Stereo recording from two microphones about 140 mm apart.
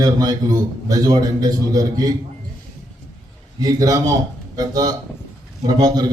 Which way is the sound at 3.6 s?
25° right (ahead or behind).